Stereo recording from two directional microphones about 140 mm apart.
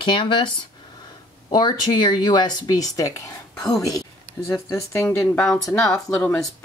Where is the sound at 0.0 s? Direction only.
35° left (ahead or behind); by 5.1 s 20° left (ahead or behind).